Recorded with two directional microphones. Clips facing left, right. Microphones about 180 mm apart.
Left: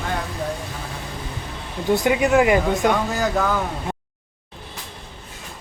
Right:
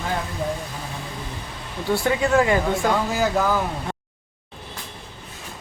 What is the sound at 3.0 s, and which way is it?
Speech, centre (ahead or behind).